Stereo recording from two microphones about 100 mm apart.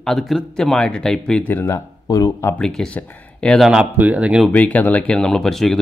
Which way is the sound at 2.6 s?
5° left (ahead or behind).